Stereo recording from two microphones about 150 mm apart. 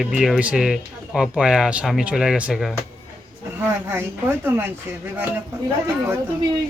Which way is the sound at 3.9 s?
15° right (ahead or behind).